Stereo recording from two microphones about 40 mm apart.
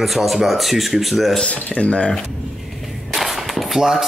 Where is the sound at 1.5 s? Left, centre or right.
Left.